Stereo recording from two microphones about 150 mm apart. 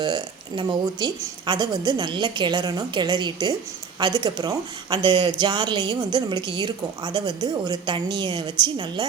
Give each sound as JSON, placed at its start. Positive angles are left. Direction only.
{"t": 0.0, "sound": "speech", "side_deg": -30}